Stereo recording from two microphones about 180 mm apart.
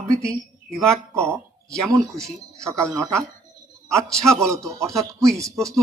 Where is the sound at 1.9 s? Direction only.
20° right (ahead or behind).